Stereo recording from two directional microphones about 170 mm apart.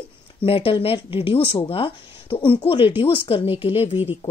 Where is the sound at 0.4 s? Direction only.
35° left (ahead or behind).